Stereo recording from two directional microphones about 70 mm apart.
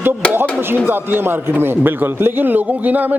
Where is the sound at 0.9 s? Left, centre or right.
Right.